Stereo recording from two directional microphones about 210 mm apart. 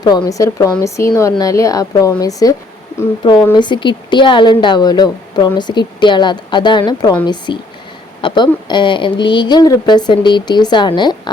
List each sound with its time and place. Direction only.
0.0 s a woman's voice: 20° left (ahead or behind)